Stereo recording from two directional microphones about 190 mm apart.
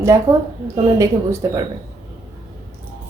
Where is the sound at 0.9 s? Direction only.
15° right (ahead or behind).